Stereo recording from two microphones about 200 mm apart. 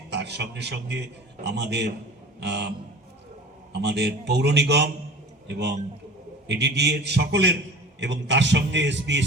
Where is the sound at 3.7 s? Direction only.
60° right (ahead or behind).